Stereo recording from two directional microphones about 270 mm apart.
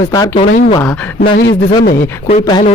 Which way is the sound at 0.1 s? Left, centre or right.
Centre.